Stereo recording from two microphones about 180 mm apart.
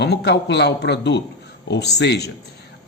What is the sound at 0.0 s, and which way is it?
Speech, 70° left (ahead or behind).